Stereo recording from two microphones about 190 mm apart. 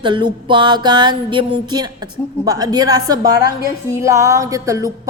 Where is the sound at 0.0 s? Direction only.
25° right (ahead or behind).